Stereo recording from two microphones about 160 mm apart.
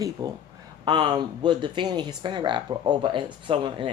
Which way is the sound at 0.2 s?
25° right (ahead or behind).